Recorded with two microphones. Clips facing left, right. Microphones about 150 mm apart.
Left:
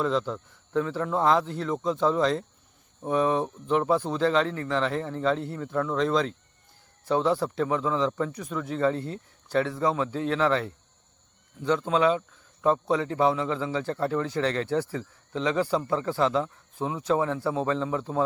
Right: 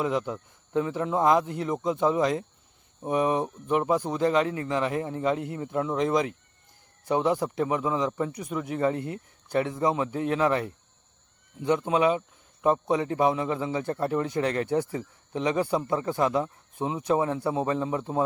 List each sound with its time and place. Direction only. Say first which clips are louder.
0.0 s a man's voice: left 1 dB; 15° right (ahead or behind)